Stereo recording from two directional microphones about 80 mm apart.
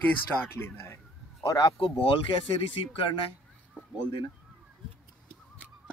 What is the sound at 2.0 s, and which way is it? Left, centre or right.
Speech, left.